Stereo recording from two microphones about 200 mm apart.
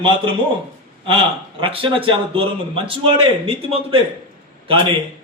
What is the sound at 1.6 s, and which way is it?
A man's voice, 25° right (ahead or behind).